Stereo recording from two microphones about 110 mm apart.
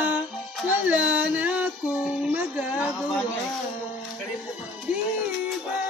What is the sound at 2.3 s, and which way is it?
Music, 10° right (ahead or behind).